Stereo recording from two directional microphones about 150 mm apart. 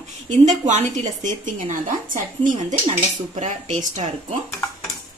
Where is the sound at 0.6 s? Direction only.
50° right (ahead or behind).